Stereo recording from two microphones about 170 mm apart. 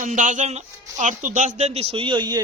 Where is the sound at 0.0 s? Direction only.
50° right (ahead or behind).